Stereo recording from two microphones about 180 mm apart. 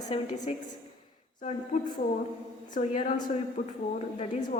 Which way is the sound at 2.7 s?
45° left (ahead or behind).